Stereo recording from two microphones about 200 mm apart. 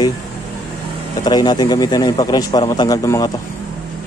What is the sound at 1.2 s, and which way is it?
Speech, 20° left (ahead or behind).